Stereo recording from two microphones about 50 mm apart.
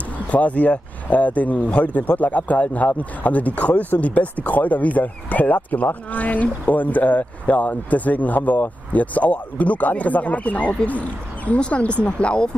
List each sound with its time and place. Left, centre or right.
0.3 s speech: left